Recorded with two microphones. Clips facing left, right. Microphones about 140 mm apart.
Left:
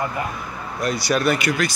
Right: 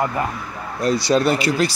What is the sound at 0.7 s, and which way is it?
Speech, 25° right (ahead or behind).